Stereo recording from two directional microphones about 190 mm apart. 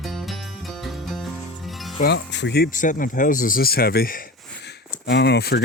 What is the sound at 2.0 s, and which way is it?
Speech, 65° left (ahead or behind).